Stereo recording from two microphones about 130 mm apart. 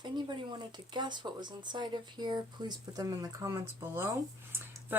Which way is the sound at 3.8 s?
15° right (ahead or behind).